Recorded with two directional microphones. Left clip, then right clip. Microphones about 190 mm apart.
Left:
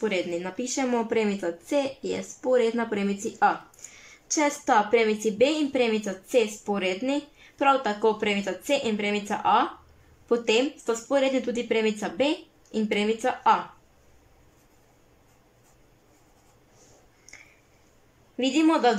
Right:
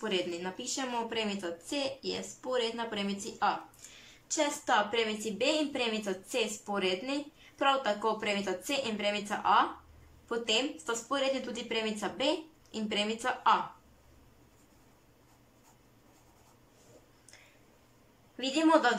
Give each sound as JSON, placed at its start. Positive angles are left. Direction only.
{"t": 0.0, "sound": "speech", "side_deg": 15}
{"t": 0.9, "sound": "speech", "side_deg": 30}
{"t": 4.3, "sound": "speech", "side_deg": 30}
{"t": 5.0, "sound": "speech", "side_deg": 15}
{"t": 18.3, "sound": "speech", "side_deg": 15}